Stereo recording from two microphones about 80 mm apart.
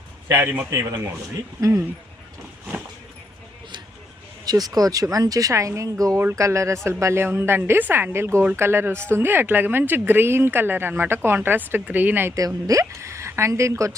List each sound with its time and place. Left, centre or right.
0.3 s a woman's voice: right
0.7 s speech: right
1.6 s speech: right
4.4 s a woman's voice: right
12.6 s speech: right